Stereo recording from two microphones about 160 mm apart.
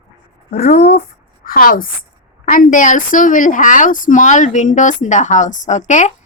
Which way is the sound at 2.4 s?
60° left (ahead or behind).